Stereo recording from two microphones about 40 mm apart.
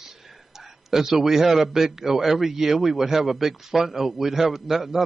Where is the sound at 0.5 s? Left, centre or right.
Centre.